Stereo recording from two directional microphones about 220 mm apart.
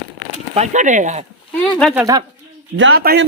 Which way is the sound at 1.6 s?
Centre (ahead or behind).